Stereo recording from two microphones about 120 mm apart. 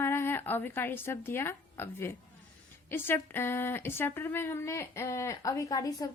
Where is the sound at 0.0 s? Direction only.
20° left (ahead or behind).